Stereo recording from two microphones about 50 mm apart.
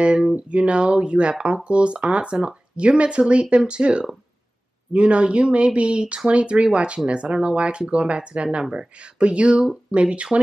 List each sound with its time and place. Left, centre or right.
0.0 s speech: centre